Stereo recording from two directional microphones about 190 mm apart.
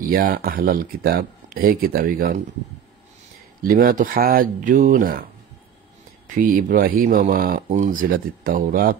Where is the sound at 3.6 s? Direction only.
50° right (ahead or behind).